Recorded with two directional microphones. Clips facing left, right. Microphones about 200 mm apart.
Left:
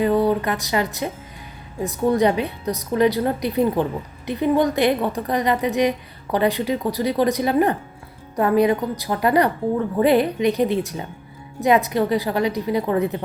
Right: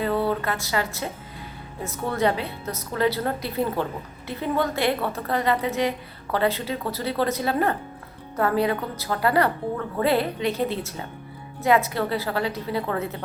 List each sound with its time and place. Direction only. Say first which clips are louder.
0.0 s a woman's voice: left 6 dB; 15° left (ahead or behind)